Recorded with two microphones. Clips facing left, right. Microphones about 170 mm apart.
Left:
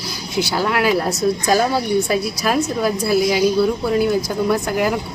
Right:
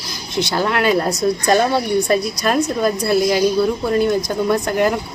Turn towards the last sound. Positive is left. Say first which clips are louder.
# right 1 dB
turn(degrees=5)  # may be behind; listen again after turning